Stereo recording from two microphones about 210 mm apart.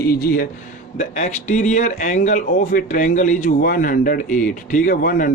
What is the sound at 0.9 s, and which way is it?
A man's voice, 35° left (ahead or behind).